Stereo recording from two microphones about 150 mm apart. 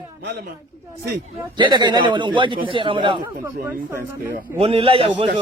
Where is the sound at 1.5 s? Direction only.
30° right (ahead or behind).